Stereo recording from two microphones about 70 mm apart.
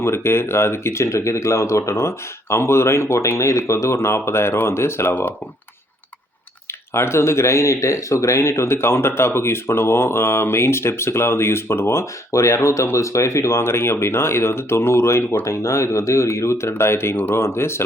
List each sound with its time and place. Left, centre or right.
0.0 s speech: left
6.9 s speech: left